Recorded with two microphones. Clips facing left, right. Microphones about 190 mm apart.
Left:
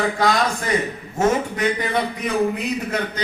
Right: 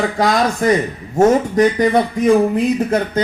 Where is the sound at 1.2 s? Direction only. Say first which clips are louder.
Right 8 dB; 40° right (ahead or behind).